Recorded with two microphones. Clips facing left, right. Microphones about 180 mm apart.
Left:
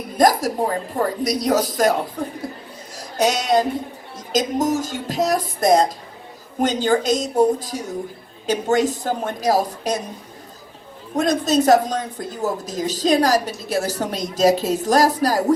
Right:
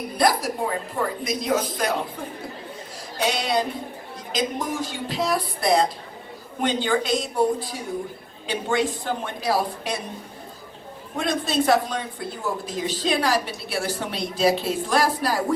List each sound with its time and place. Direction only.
0.2 s a woman's voice: 45° left (ahead or behind)
11.1 s a woman's voice: 40° left (ahead or behind)